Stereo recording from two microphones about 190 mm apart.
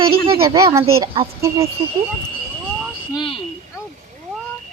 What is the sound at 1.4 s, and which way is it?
Speech, 15° right (ahead or behind).